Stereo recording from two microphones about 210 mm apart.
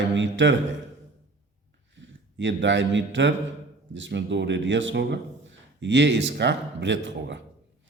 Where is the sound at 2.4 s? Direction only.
60° right (ahead or behind).